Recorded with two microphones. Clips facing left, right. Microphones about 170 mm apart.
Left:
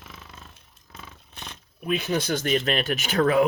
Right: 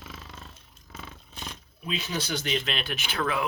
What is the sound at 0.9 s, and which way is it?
Vehicle, centre (ahead or behind).